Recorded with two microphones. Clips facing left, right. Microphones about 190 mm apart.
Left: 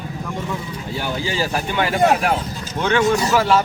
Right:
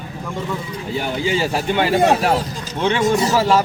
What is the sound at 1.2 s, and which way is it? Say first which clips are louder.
Speech: right 5 dB; 25° right (ahead or behind).